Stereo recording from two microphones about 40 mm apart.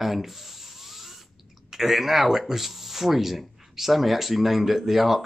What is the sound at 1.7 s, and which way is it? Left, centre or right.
Speech, centre.